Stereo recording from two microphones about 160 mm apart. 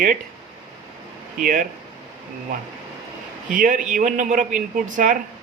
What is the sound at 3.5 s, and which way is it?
Speech, 55° right (ahead or behind).